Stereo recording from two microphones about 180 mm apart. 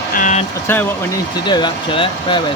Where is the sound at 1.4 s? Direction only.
25° left (ahead or behind).